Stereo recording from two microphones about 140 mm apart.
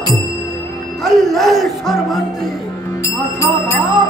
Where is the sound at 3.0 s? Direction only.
20° left (ahead or behind).